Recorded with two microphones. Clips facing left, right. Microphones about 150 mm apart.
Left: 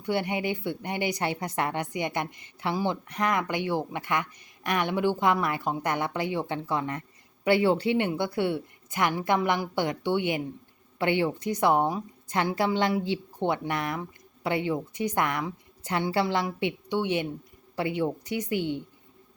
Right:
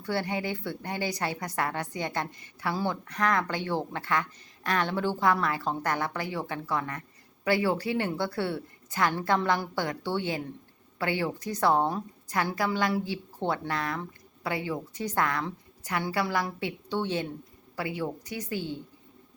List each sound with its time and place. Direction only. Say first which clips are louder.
0.0 s a woman's voice: left 2 dB; 20° left (ahead or behind)
12.3 s a woman's voice: left 3 dB; 25° left (ahead or behind)